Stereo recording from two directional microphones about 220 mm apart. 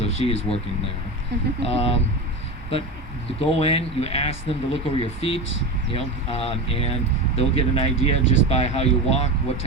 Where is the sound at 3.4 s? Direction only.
25° left (ahead or behind).